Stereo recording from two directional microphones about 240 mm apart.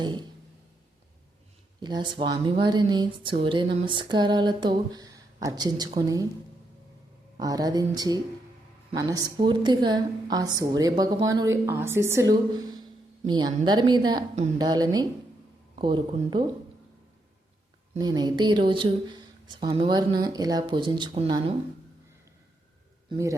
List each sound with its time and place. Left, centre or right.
0.0 s a sound: centre
1.8 s speech: centre
7.3 s speech: centre
17.9 s speech: centre
23.0 s a man's voice: centre